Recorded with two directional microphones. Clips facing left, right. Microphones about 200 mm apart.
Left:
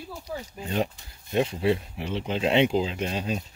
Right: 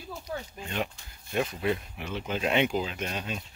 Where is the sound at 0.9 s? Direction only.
25° left (ahead or behind).